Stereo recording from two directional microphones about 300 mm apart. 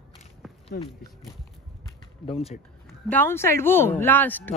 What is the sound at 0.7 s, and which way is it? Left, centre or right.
Speech, left.